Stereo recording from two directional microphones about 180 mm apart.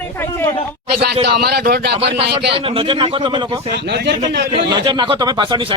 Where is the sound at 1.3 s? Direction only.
60° right (ahead or behind).